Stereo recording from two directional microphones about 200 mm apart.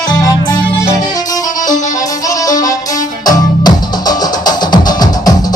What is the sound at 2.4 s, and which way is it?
Music, 15° left (ahead or behind).